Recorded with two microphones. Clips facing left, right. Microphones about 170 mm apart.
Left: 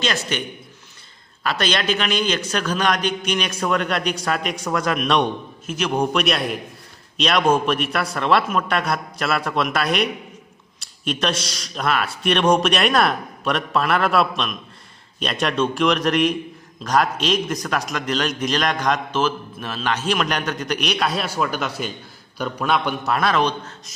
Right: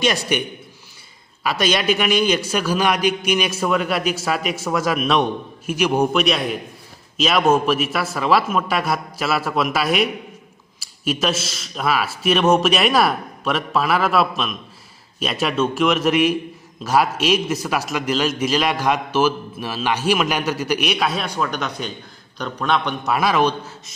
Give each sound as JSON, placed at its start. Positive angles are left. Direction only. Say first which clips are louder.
{"t": 0.0, "sound": "a man's voice", "louder": "right 4 dB", "side_deg": -15}
{"t": 1.4, "sound": "a man's voice", "louder": "right 2 dB", "side_deg": -10}
{"t": 23.1, "sound": "a man's voice", "louder": "right 2 dB", "side_deg": -5}